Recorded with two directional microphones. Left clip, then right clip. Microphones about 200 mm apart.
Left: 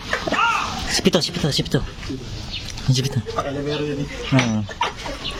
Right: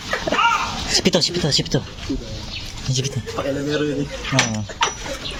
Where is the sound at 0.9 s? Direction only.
20° left (ahead or behind).